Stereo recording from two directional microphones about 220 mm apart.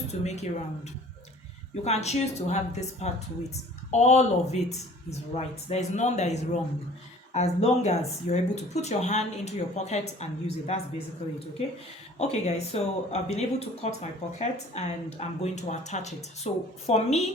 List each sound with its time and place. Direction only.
0.1 s speech: 30° left (ahead or behind)
1.7 s speech: 30° left (ahead or behind)
12.2 s speech: 30° left (ahead or behind)